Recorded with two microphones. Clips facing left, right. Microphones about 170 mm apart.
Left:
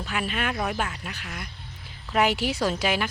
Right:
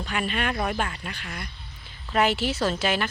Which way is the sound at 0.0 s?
5° left (ahead or behind).